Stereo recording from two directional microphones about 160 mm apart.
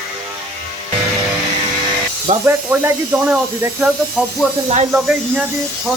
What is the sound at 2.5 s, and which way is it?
Speech, 15° right (ahead or behind).